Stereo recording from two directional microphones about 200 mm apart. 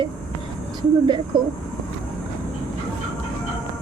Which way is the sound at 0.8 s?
25° right (ahead or behind).